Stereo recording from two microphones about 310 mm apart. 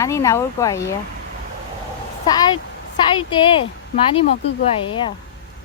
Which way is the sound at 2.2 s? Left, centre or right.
Centre.